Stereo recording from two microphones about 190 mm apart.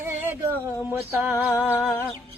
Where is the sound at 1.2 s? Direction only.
10° right (ahead or behind).